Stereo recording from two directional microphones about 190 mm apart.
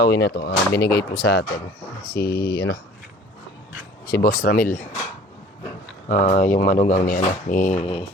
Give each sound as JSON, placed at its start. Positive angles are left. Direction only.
{"t": 0.0, "sound": "speech", "side_deg": 60}
{"t": 4.0, "sound": "speech", "side_deg": 55}
{"t": 6.1, "sound": "speech", "side_deg": 40}